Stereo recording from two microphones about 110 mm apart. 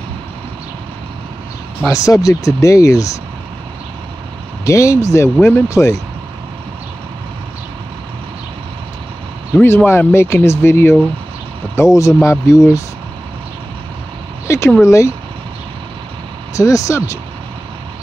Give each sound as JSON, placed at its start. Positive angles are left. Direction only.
{"t": 1.9, "sound": "speech", "side_deg": 30}
{"t": 4.6, "sound": "speech", "side_deg": 25}
{"t": 9.6, "sound": "speech", "side_deg": 20}
{"t": 14.8, "sound": "speech", "side_deg": 25}
{"t": 16.5, "sound": "speech", "side_deg": 30}